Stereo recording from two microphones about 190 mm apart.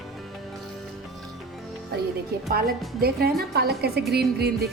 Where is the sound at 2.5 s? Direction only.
55° right (ahead or behind).